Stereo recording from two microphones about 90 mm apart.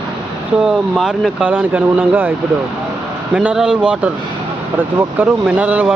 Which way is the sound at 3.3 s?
10° right (ahead or behind).